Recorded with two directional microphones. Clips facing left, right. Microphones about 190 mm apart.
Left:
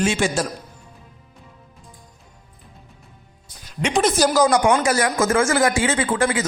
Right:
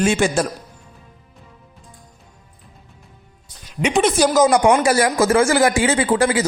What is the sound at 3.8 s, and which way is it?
Speech, 10° right (ahead or behind).